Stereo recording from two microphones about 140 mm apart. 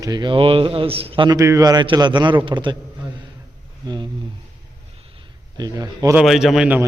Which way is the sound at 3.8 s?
30° right (ahead or behind).